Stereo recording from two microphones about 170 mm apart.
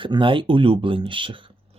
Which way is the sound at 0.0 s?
30° right (ahead or behind).